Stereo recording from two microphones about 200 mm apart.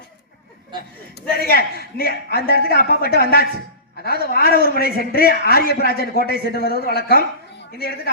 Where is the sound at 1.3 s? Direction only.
50° left (ahead or behind).